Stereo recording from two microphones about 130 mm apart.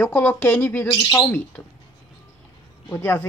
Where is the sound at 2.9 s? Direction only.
20° left (ahead or behind).